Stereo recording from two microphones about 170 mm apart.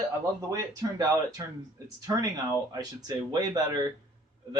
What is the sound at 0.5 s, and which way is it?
Speech, 20° right (ahead or behind).